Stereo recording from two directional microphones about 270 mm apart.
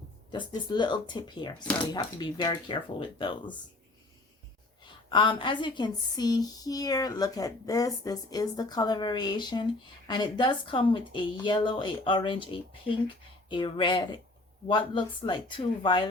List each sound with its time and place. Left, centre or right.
0.3 s a woman's voice: centre
5.0 s a woman's voice: centre